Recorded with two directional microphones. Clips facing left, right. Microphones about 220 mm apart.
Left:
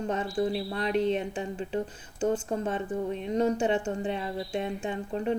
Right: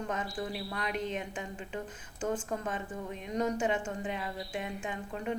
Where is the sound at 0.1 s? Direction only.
30° left (ahead or behind).